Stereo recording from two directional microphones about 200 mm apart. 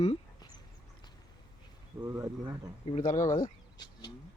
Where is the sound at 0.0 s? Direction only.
30° left (ahead or behind).